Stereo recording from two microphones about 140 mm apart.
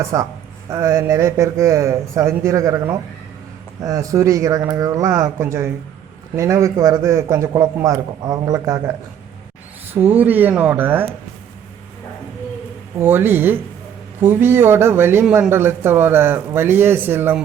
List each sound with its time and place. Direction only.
0.0 s a man's voice: 20° right (ahead or behind)
13.0 s speech: 15° right (ahead or behind)